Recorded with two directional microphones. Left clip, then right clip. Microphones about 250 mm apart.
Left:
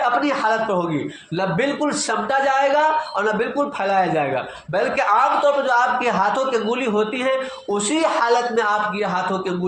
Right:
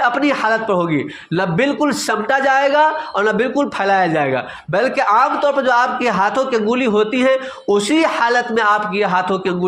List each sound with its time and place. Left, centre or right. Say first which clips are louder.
0.0 s a man's voice: right 3 dB; right